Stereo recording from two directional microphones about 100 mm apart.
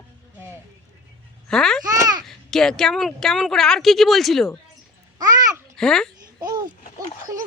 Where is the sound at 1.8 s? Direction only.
35° right (ahead or behind).